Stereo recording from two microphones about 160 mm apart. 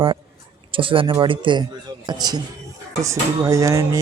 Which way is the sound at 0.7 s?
35° right (ahead or behind).